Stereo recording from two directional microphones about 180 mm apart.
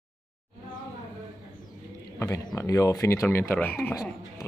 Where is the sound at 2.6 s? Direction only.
15° left (ahead or behind).